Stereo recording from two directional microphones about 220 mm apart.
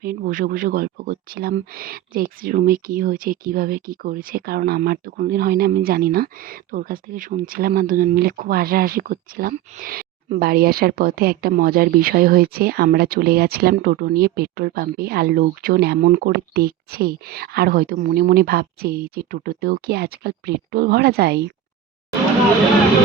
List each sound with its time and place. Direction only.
0.0 s speech: 40° right (ahead or behind)